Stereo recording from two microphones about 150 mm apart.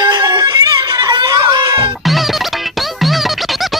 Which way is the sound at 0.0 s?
25° right (ahead or behind).